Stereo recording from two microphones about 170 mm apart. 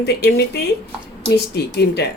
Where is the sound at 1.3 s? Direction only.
75° left (ahead or behind).